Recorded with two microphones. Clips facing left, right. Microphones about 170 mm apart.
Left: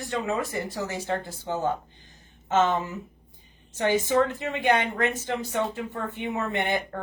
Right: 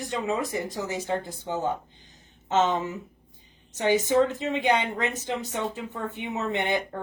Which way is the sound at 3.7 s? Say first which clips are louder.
Right 1 dB; 20° right (ahead or behind).